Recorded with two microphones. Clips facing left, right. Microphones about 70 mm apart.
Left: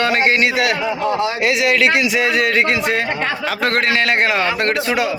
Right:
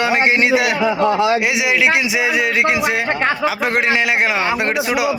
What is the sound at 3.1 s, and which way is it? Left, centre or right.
Speech, right.